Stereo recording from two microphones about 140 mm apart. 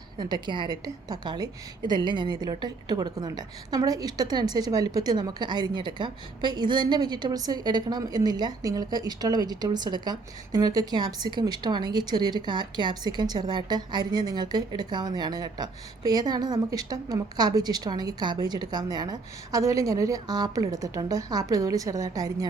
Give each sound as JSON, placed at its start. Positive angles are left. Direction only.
{"t": 0.2, "sound": "a woman's voice", "side_deg": -30}